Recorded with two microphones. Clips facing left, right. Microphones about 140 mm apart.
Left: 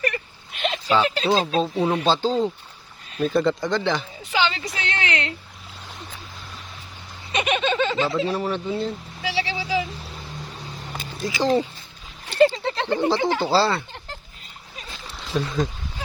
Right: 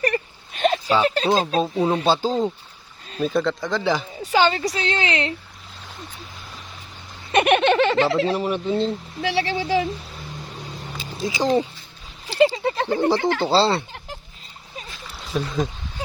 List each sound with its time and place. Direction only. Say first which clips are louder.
0.0 s a sound: right 4 dB; 40° right (ahead or behind)
1.0 s a woman's voice: right 2 dB; 40° right (ahead or behind)
2.0 s speech: right 1 dB; 10° right (ahead or behind)
4.2 s a woman's voice: right 5 dB; 40° right (ahead or behind)
7.3 s speech: right 6 dB; 65° right (ahead or behind)
8.4 s speech: right 3 dB; 15° right (ahead or behind)
9.2 s speech: right 4 dB; 55° right (ahead or behind)
11.2 s speech: right 1 dB; 20° right (ahead or behind)
12.5 s a sound: right 2 dB; 10° right (ahead or behind)
13.4 s speech: right 2 dB; 25° right (ahead or behind)
15.2 s speech: even; centre (ahead or behind)